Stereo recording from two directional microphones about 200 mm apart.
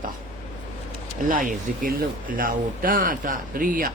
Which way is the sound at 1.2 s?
40° right (ahead or behind).